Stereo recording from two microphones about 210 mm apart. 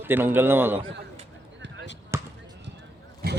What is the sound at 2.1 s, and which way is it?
Basketball bounce, 10° right (ahead or behind).